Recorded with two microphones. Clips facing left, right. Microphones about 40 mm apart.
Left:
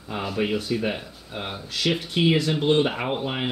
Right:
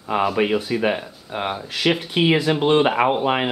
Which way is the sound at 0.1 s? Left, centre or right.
Right.